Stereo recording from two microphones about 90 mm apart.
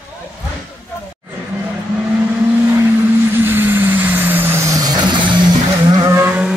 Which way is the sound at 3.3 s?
25° right (ahead or behind).